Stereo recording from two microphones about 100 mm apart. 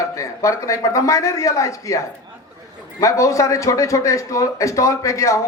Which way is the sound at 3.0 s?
30° left (ahead or behind).